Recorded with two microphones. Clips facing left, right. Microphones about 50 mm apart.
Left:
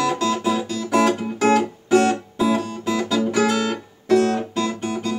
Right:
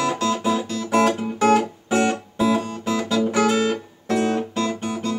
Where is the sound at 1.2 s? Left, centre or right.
Centre.